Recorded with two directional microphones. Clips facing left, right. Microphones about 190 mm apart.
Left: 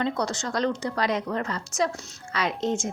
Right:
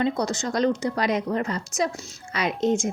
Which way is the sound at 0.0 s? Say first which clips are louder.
Right 3 dB; 10° right (ahead or behind).